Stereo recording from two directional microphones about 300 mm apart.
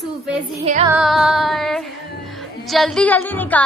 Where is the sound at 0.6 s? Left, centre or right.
Right.